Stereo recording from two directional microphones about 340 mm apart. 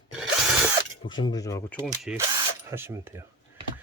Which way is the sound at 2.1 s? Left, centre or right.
Centre.